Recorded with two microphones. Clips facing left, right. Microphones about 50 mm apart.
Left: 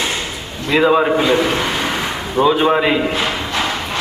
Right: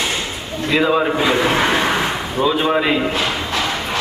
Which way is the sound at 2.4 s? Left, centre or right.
Centre.